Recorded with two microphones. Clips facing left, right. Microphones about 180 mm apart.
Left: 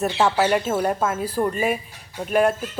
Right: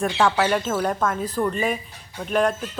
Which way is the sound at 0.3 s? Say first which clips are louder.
Left 2 dB; 10° left (ahead or behind).